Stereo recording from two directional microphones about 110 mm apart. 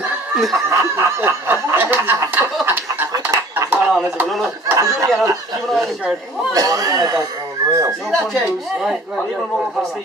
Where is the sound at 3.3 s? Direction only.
20° right (ahead or behind).